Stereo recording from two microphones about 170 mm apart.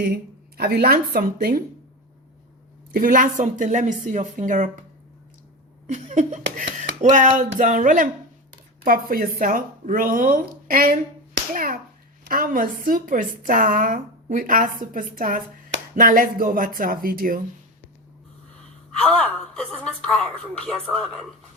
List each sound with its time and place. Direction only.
0.0 s speech: 70° right (ahead or behind)
2.9 s speech: 55° right (ahead or behind)
5.9 s speech: 45° right (ahead or behind)
11.5 s slap: 55° right (ahead or behind)
12.3 s speech: 55° right (ahead or behind)
18.9 s speech: 5° left (ahead or behind)